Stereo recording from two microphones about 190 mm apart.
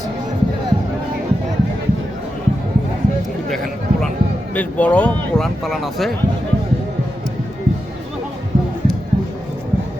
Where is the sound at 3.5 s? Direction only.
Centre (ahead or behind).